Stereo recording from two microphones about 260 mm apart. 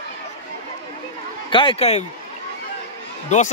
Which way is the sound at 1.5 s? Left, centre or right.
Centre.